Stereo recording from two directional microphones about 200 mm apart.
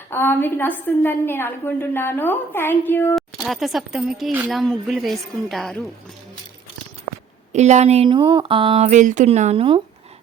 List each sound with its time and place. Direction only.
0.1 s a woman's voice: 10° left (ahead or behind)
7.5 s a woman's voice: 35° right (ahead or behind)